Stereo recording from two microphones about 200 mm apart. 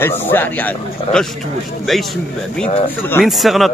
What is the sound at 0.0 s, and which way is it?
Speech, 10° left (ahead or behind).